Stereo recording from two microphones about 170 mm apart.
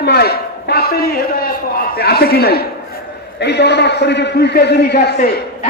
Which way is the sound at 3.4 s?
80° left.